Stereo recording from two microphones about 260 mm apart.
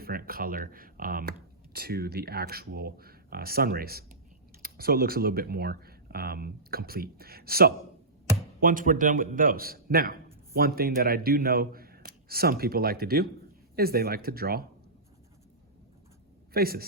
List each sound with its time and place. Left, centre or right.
0.0 s a man's voice: right
16.5 s a man's voice: right